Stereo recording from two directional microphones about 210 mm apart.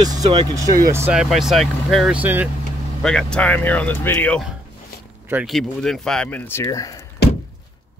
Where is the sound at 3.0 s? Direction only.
5° left (ahead or behind).